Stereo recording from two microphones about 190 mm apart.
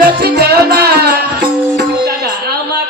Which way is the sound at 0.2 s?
55° right (ahead or behind).